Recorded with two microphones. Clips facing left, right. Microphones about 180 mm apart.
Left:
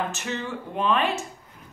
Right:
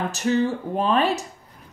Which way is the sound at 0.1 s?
40° right (ahead or behind).